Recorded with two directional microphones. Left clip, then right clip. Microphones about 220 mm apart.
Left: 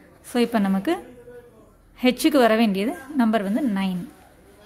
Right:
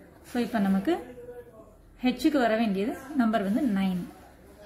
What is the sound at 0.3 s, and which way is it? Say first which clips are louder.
Speech: left 6 dB; 40° left (ahead or behind).